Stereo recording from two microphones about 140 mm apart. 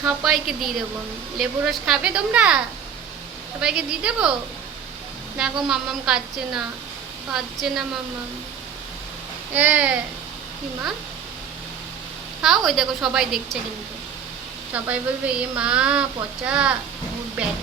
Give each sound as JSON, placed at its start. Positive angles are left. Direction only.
{"t": 0.3, "sound": "a woman's voice", "side_deg": 0}
{"t": 3.6, "sound": "a woman's voice", "side_deg": -5}
{"t": 5.4, "sound": "a woman's voice", "side_deg": -5}
{"t": 7.3, "sound": "a woman's voice", "side_deg": 0}
{"t": 9.5, "sound": "a woman's voice", "side_deg": -10}
{"t": 12.4, "sound": "a woman's voice", "side_deg": 0}
{"t": 14.7, "sound": "a woman's voice", "side_deg": -10}